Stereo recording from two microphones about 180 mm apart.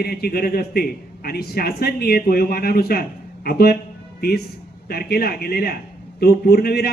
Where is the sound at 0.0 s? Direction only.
60° left (ahead or behind).